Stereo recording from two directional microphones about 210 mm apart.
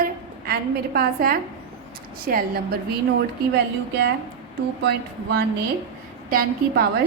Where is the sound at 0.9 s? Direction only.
45° right (ahead or behind).